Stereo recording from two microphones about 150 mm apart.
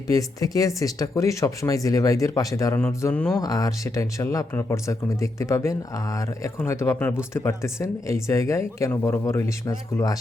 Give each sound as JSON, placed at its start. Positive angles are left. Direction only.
{"t": 0.1, "sound": "speech", "side_deg": 20}